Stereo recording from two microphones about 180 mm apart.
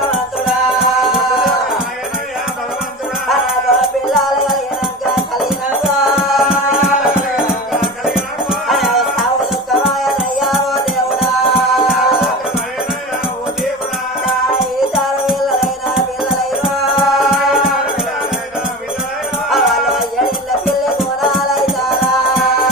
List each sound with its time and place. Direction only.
0.1 s music: centre (ahead or behind)
3.3 s music: centre (ahead or behind)
10.4 s music: centre (ahead or behind)
14.2 s music: centre (ahead or behind)
19.5 s music: centre (ahead or behind)